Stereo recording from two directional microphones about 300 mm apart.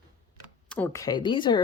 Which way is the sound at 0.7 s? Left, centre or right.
Centre.